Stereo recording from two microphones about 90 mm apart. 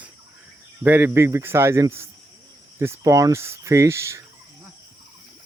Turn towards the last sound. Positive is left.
turn(degrees=-30)  # may be behind; listen again after turning